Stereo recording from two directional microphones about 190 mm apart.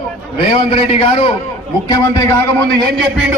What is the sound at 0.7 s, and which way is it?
Speech, 30° left (ahead or behind).